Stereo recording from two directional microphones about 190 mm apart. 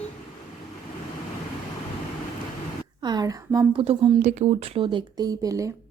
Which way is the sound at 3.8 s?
30° right (ahead or behind).